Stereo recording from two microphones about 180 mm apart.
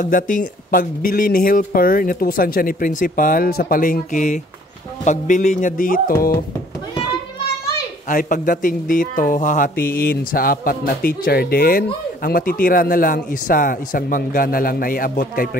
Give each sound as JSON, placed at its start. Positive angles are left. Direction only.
{"t": 0.0, "sound": "speech", "side_deg": 45}
{"t": 8.1, "sound": "speech", "side_deg": 50}